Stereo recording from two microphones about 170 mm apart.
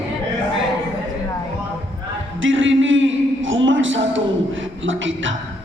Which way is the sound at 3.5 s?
90° right.